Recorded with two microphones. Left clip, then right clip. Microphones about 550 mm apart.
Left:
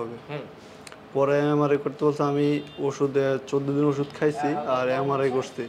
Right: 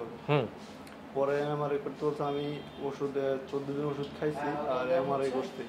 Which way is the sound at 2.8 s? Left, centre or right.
Left.